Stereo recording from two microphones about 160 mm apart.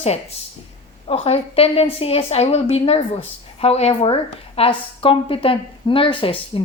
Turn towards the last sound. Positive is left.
turn(degrees=35)  # may be behind; listen again after turning